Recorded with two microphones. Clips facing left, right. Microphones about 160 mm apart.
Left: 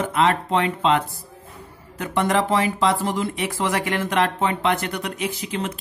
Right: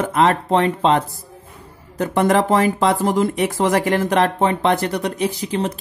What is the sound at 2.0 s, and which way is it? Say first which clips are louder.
Speech: right 5 dB; 45° right (ahead or behind).